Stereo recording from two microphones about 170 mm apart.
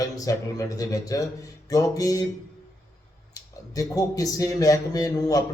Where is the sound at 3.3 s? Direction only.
20° left (ahead or behind).